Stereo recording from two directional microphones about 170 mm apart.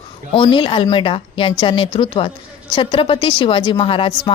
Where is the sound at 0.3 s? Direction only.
30° left (ahead or behind).